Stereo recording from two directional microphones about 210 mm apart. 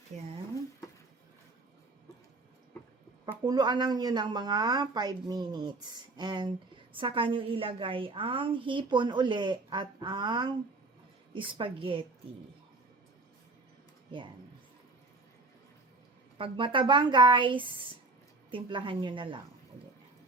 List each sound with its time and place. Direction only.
0.1 s speech: 35° right (ahead or behind)
3.4 s a woman's voice: 20° right (ahead or behind)
16.4 s a woman's voice: 25° right (ahead or behind)